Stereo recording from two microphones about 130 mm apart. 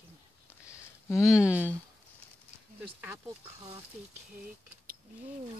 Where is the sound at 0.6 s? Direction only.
20° left (ahead or behind).